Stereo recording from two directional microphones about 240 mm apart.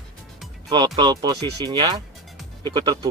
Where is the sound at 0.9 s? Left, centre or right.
Centre.